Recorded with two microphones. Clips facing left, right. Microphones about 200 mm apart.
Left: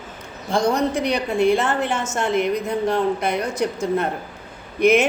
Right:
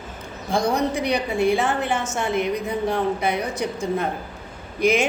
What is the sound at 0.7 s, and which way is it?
Speech, 60° left (ahead or behind).